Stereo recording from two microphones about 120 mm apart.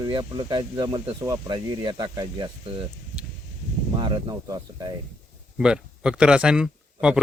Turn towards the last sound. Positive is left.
turn(degrees=-5)  # may be behind; listen again after turning